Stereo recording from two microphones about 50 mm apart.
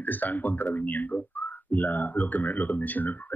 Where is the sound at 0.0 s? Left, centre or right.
Left.